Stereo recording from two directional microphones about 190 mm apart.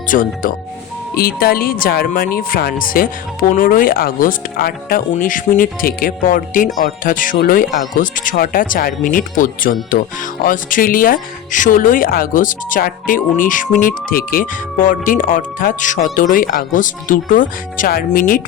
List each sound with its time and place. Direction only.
0.1 s speech: 45° left (ahead or behind)